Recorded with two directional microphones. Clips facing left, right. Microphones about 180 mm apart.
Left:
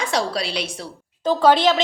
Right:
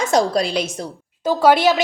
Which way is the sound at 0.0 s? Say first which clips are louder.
Right 6 dB; 45° right (ahead or behind).